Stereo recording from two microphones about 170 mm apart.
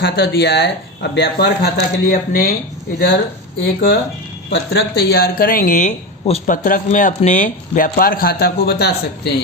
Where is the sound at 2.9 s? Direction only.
80° left.